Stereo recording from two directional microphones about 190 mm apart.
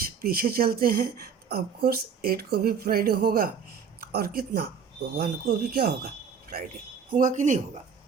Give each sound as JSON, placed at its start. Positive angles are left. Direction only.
{"t": 0.2, "sound": "a woman's voice", "side_deg": -55}
{"t": 7.1, "sound": "a woman's voice", "side_deg": -45}